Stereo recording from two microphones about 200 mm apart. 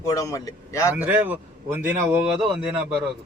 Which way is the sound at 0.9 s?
10° right (ahead or behind).